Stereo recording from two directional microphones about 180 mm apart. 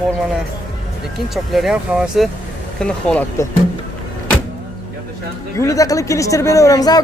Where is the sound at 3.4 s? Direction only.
15° left (ahead or behind).